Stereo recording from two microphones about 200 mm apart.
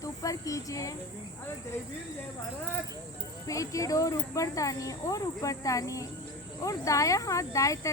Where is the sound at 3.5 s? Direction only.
15° left (ahead or behind).